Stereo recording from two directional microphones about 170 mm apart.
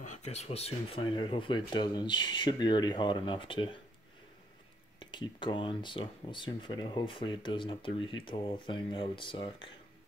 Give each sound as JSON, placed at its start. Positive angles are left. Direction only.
{"t": 0.0, "sound": "speech", "side_deg": 45}
{"t": 5.1, "sound": "speech", "side_deg": 30}